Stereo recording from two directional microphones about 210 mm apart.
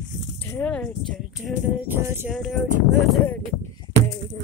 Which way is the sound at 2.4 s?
Centre (ahead or behind).